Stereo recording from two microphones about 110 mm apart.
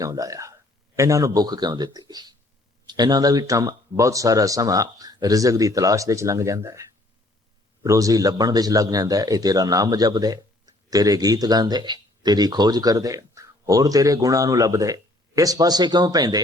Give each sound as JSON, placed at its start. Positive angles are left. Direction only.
{"t": 0.0, "sound": "a man's voice", "side_deg": -30}
{"t": 7.9, "sound": "a man's voice", "side_deg": -30}